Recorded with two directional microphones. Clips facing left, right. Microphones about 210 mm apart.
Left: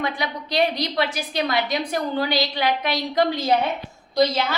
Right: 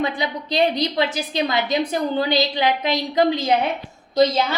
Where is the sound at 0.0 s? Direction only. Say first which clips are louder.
Right 3 dB; 25° right (ahead or behind).